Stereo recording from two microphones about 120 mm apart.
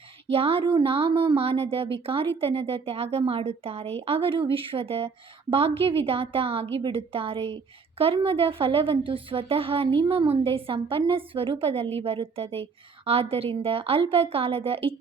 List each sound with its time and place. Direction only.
0.3 s a woman's voice: 50° right (ahead or behind)